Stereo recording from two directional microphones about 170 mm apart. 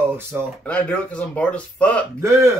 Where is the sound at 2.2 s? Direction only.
15° right (ahead or behind).